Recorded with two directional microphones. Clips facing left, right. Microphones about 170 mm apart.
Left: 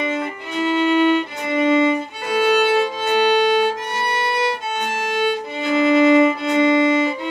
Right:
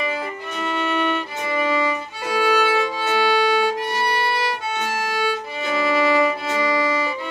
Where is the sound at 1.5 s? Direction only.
25° left (ahead or behind).